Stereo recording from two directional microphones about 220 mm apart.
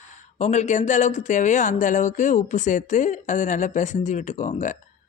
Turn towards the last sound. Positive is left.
turn(degrees=35)  # may be behind; listen again after turning